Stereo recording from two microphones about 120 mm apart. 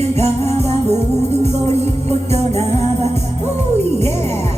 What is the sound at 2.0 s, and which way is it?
Music, 60° right (ahead or behind).